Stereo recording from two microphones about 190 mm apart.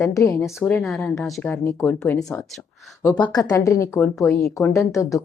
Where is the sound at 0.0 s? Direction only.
15° left (ahead or behind).